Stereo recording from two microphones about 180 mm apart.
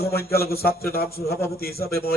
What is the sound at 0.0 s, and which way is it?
A man's voice, 60° left (ahead or behind).